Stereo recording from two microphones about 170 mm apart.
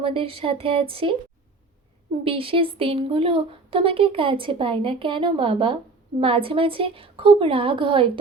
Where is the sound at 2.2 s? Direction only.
35° right (ahead or behind).